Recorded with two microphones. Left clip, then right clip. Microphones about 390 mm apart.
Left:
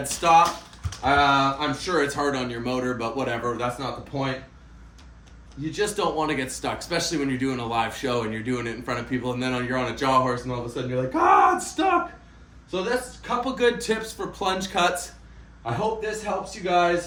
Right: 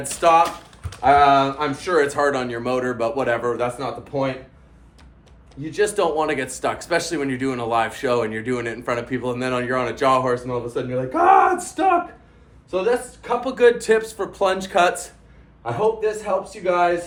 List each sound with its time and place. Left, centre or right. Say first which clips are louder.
0.0 s speech: right 2 dB; centre
5.7 s speech: right 5 dB; centre
13.2 s speech: right 7 dB; centre